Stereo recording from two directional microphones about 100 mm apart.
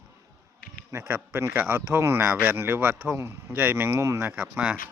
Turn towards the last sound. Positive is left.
turn(degrees=-15)  # may be behind; listen again after turning